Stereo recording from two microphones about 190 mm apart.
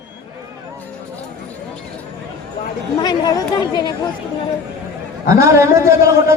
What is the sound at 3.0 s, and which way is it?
Speech, 20° left (ahead or behind).